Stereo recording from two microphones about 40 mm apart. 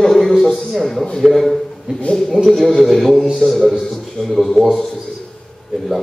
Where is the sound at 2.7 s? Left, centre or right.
Centre.